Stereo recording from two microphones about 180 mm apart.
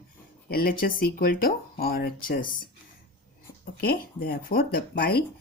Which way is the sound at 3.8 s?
55° left (ahead or behind).